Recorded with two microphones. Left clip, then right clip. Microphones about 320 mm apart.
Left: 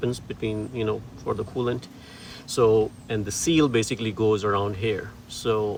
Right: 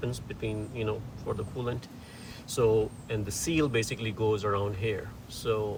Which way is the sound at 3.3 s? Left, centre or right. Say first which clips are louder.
Left 7 dB; centre.